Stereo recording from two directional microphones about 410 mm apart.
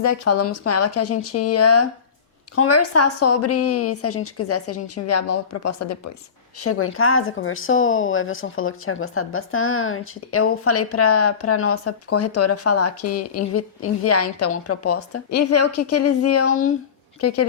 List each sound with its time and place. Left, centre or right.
0.0 s speech: left